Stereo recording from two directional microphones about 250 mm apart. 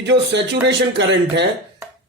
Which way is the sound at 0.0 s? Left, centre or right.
Right.